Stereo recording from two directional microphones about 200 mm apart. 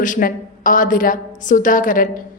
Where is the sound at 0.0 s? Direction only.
40° left (ahead or behind).